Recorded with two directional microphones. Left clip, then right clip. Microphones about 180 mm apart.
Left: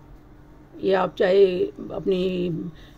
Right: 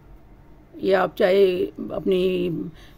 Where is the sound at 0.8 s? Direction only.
25° right (ahead or behind).